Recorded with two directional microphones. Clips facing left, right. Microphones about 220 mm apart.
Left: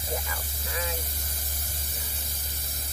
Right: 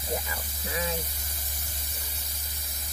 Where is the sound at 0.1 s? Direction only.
25° right (ahead or behind).